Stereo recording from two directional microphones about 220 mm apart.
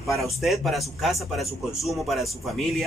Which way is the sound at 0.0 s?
Centre (ahead or behind).